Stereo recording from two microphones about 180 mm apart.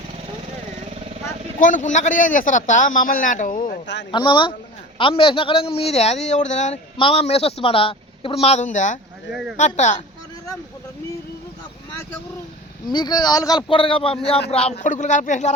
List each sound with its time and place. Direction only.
1.5 s a man's voice: 45° left (ahead or behind)
4.1 s speech: 25° left (ahead or behind)
6.9 s speech: 30° left (ahead or behind)
9.3 s speech: centre (ahead or behind)
9.6 s speech: 40° left (ahead or behind)
12.9 s a man's voice: 25° left (ahead or behind); by 15.5 s 40° left (ahead or behind)